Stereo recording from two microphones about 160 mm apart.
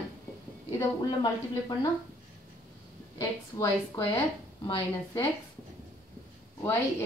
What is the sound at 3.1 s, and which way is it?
Speech, 20° left (ahead or behind).